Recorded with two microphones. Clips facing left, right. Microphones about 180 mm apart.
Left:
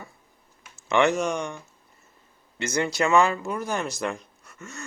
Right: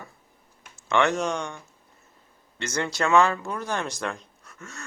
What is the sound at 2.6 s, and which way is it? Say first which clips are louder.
Speech: left 3 dB; 10° left (ahead or behind).